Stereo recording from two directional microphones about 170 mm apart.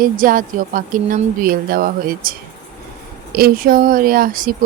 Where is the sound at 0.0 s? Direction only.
55° right (ahead or behind).